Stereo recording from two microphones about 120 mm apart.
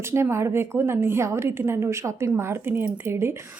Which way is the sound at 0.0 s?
20° right (ahead or behind).